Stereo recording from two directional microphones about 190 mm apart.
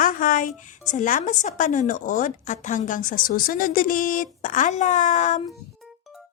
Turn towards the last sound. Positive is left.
turn(degrees=40)  # may be behind; listen again after turning